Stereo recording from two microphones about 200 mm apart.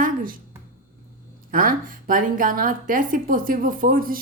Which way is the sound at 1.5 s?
45° right (ahead or behind).